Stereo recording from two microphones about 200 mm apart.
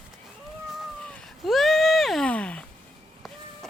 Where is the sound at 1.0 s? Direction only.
5° left (ahead or behind).